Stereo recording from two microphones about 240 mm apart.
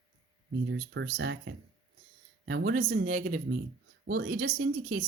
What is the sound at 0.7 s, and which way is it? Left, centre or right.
Speech, right.